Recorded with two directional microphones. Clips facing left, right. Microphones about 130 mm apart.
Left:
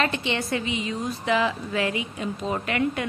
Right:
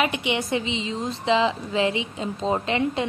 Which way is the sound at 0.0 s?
15° right (ahead or behind).